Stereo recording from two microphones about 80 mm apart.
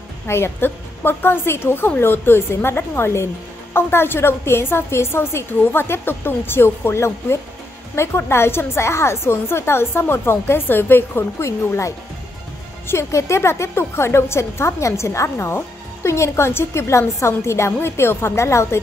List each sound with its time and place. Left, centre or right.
0.3 s a woman's voice: left